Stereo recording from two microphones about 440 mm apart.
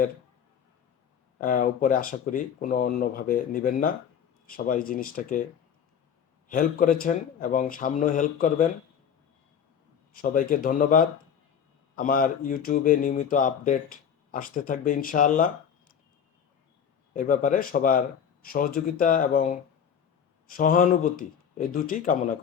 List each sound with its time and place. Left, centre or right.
1.4 s speech: centre
6.5 s speech: centre
10.1 s speech: centre
17.2 s speech: centre